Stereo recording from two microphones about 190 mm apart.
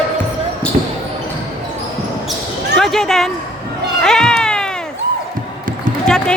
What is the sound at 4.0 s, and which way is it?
Cat, 5° left (ahead or behind).